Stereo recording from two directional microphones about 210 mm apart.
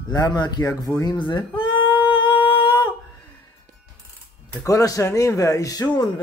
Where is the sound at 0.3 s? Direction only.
20° left (ahead or behind).